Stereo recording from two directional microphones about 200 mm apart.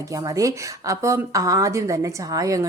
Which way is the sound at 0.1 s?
15° right (ahead or behind).